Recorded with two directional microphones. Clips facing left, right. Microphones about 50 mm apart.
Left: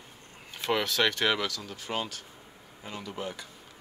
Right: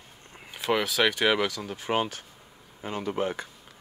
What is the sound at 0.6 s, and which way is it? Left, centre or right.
Speech, centre.